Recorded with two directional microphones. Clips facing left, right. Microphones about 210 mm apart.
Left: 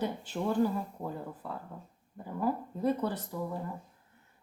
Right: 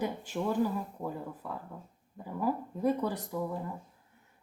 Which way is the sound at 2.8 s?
15° right (ahead or behind).